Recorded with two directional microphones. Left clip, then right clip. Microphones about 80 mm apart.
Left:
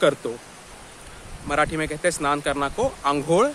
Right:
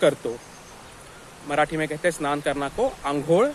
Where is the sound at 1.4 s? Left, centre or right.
Left.